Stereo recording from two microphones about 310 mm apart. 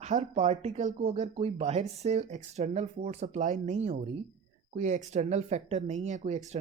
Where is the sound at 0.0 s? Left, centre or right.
Right.